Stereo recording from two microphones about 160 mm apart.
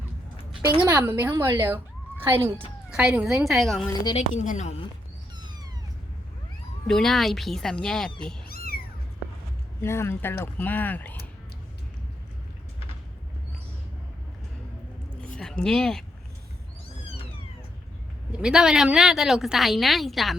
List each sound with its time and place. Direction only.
0.9 s a woman's voice: 10° right (ahead or behind)
1.3 s speech: 25° right (ahead or behind)
1.5 s a woman's voice: 15° right (ahead or behind)
4.1 s a woman's voice: 45° left (ahead or behind)
6.8 s a woman's voice: 5° left (ahead or behind)
8.4 s cat: 70° left (ahead or behind)
9.8 s speech: 15° left (ahead or behind)
15.4 s speech: 5° left (ahead or behind)
18.3 s a woman's voice: 5° right (ahead or behind)